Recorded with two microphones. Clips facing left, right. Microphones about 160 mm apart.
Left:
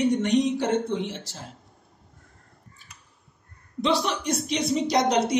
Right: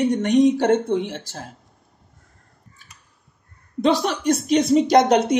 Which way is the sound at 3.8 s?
50° right (ahead or behind).